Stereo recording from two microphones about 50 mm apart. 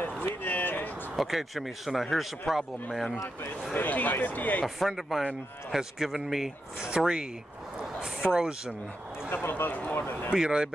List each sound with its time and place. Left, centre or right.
0.2 s a sound: left
1.1 s speech: centre
3.7 s speech: left
4.6 s speech: centre
8.0 s speech: centre
9.3 s speech: left
10.3 s speech: centre